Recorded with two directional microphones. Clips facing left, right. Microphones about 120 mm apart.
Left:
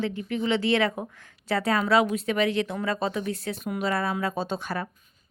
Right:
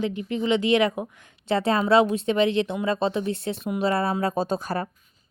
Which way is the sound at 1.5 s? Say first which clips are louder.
Right 3 dB; 25° right (ahead or behind).